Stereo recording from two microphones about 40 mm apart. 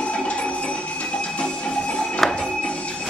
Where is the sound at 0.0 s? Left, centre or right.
Left.